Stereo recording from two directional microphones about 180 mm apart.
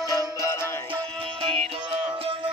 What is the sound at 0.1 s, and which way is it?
Music, 20° left (ahead or behind).